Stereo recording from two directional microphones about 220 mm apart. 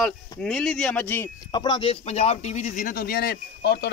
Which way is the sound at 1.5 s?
20° left (ahead or behind).